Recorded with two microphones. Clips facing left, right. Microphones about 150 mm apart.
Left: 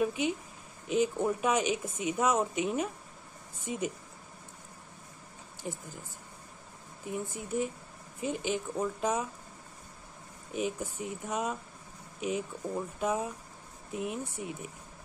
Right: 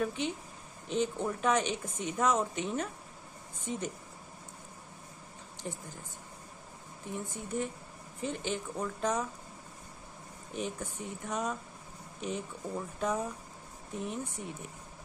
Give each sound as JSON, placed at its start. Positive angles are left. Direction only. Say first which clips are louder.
{"t": 0.0, "sound": "speech", "louder": "left 3 dB", "side_deg": 10}
{"t": 5.6, "sound": "speech", "louder": "left 2 dB", "side_deg": 5}
{"t": 7.1, "sound": "speech", "louder": "left 3 dB", "side_deg": 5}
{"t": 10.5, "sound": "speech", "louder": "left 4 dB", "side_deg": 10}